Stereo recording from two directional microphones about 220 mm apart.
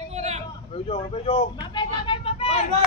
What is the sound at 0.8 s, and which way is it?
Vehicle, 25° left (ahead or behind).